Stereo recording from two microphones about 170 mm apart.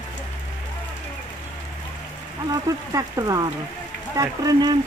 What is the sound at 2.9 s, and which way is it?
Speech, 20° right (ahead or behind).